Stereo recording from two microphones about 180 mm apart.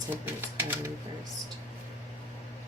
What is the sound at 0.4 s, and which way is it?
Typewriter, 10° right (ahead or behind).